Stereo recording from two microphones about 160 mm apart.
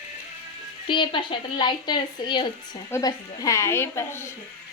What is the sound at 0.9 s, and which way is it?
A woman's voice, 30° left (ahead or behind).